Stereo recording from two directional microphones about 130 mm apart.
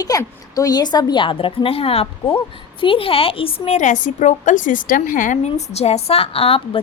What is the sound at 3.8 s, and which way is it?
A woman's voice, 75° left (ahead or behind).